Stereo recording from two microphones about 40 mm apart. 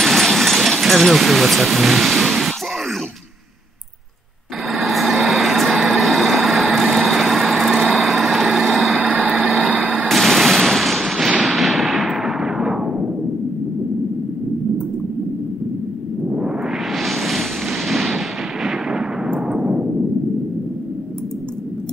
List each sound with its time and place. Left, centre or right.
0.0 s a sound: centre
4.6 s vehicle: centre
8.9 s vehicle: centre
9.8 s gunshot: centre
10.0 s gunshot: centre
11.4 s a sound: centre
16.3 s music: right
16.6 s a sound: centre
19.4 s timpani: centre